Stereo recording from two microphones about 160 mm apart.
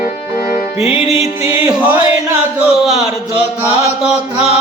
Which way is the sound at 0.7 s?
40° left (ahead or behind).